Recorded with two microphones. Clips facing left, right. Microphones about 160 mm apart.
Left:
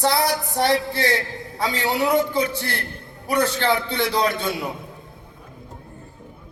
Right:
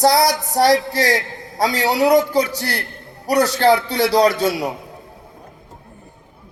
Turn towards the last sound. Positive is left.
turn(degrees=-40)  # may be behind; listen again after turning